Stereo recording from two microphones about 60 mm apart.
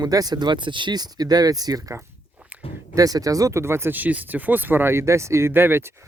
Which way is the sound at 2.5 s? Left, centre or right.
Centre.